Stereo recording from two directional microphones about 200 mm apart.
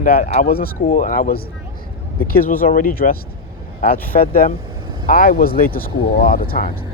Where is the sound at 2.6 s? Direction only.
45° left (ahead or behind).